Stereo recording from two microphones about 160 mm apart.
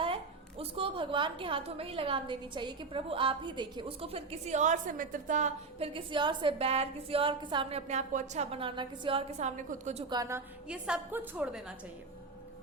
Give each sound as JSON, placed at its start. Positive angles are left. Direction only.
{"t": 0.6, "sound": "a woman's voice", "side_deg": -35}
{"t": 5.9, "sound": "a woman's voice", "side_deg": -30}
{"t": 10.1, "sound": "a woman's voice", "side_deg": -20}
{"t": 10.7, "sound": "a woman's voice", "side_deg": -5}